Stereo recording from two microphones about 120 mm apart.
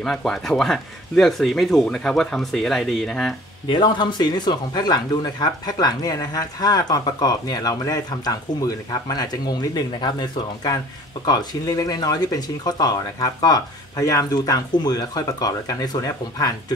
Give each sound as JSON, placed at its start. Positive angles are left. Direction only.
{"t": 0.0, "sound": "speech", "side_deg": 5}
{"t": 3.6, "sound": "speech", "side_deg": 40}